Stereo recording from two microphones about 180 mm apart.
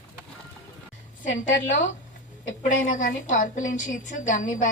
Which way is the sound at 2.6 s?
45° left (ahead or behind).